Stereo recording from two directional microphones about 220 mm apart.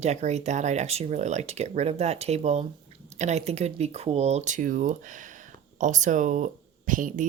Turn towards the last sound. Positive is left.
turn(degrees=-35)  # may be behind; listen again after turning